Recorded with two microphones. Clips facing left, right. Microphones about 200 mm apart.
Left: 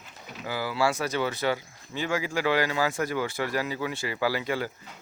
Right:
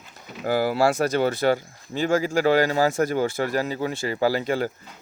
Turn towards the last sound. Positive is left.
turn(degrees=-45)  # may be behind; listen again after turning